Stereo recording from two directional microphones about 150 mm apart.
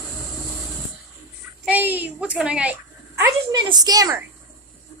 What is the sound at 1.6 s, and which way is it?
A woman's voice, 10° right (ahead or behind).